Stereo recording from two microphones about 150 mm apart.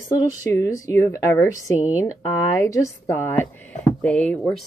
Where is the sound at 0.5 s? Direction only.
20° left (ahead or behind).